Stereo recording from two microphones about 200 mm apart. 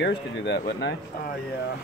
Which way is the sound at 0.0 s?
55° left (ahead or behind).